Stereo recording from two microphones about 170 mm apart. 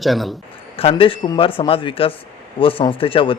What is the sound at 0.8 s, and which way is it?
A man's voice, 35° left (ahead or behind).